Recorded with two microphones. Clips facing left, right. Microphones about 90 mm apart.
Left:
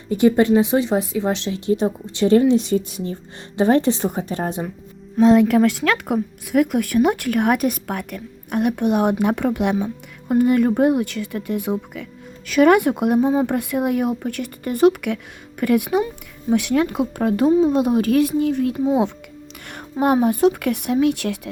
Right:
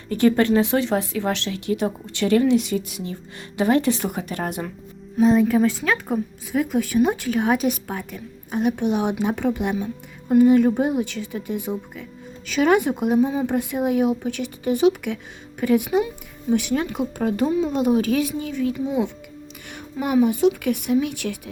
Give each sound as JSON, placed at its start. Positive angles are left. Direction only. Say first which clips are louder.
{"t": 0.1, "sound": "speech", "louder": "left 3 dB", "side_deg": 20}
{"t": 5.2, "sound": "speech", "louder": "left 3 dB", "side_deg": 85}
{"t": 13.1, "sound": "speech", "louder": "left 2 dB", "side_deg": 50}
{"t": 17.0, "sound": "speech", "louder": "left 4 dB", "side_deg": 50}
{"t": 19.7, "sound": "music", "louder": "left 7 dB", "side_deg": 55}
{"t": 20.2, "sound": "speech", "louder": "left 2 dB", "side_deg": 55}